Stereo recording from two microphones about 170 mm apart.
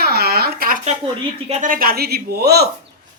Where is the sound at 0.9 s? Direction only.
40° right (ahead or behind); by 2.7 s 70° right (ahead or behind).